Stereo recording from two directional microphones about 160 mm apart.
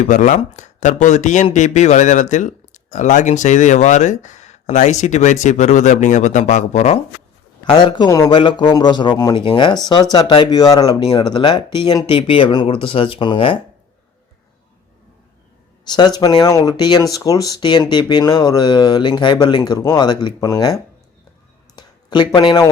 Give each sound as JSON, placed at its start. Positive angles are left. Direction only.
{"t": 0.0, "sound": "speech", "side_deg": 50}
{"t": 7.6, "sound": "speech", "side_deg": 30}
{"t": 15.9, "sound": "speech", "side_deg": 25}
{"t": 21.8, "sound": "a sound", "side_deg": 25}